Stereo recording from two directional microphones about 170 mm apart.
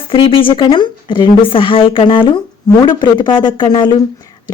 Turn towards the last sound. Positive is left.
turn(degrees=25)  # may be behind; listen again after turning